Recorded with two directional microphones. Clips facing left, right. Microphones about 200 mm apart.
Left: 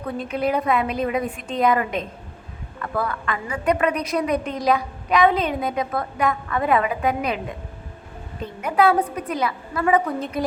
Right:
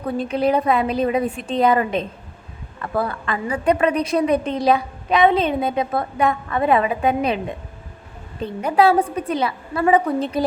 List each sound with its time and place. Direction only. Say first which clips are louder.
0.2 s a woman's voice: right 4 dB; 30° right (ahead or behind)
8.6 s a woman's voice: right 2 dB; 30° right (ahead or behind)